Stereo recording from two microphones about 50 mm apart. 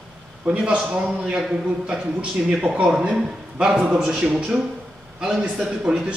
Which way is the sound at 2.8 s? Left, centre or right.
Centre.